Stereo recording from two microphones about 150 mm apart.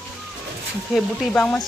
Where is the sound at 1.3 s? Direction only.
5° left (ahead or behind).